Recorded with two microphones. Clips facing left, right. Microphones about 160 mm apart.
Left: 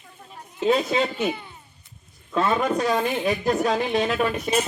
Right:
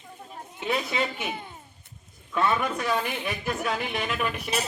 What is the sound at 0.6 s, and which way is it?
Speech, 35° left (ahead or behind).